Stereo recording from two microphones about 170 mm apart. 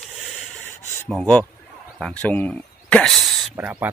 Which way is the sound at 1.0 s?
5° left (ahead or behind).